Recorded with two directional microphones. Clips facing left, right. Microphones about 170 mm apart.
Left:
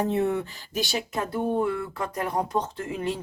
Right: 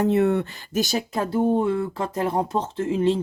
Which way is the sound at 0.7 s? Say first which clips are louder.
Right 5 dB; 45° right (ahead or behind).